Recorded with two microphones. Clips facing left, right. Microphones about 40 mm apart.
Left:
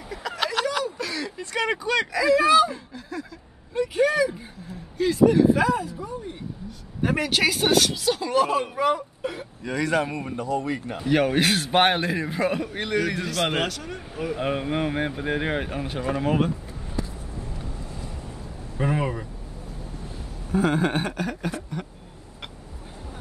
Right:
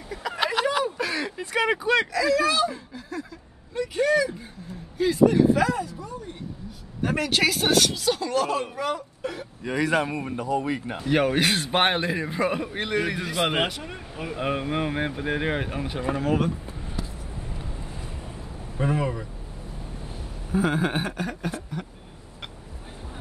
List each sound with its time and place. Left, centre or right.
0.1 s a sound: centre
0.8 s a sound: right
2.1 s speech: centre
2.7 s a sound: centre
3.7 s speech: centre
4.9 s speech: centre
5.6 s speech: centre
8.3 s speech: centre
9.6 s a man's voice: centre
11.0 s a man's voice: centre
14.1 s speech: centre
16.2 s speech: centre
18.8 s speech: centre
20.5 s speech: centre